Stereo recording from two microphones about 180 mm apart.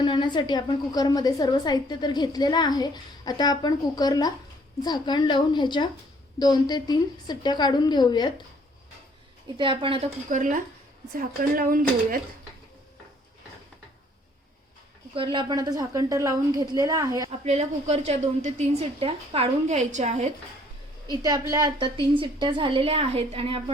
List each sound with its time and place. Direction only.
0.0 s a woman's voice: 25° left (ahead or behind)
9.6 s a woman's voice: 30° right (ahead or behind)
10.2 s speech: 45° right (ahead or behind)
15.1 s a woman's voice: 30° right (ahead or behind)
17.4 s a woman's voice: 40° right (ahead or behind)
21.1 s a woman's voice: 20° right (ahead or behind)